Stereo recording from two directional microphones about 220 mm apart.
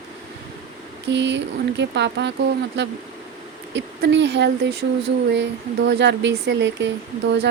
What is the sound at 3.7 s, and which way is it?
Speech, 55° right (ahead or behind).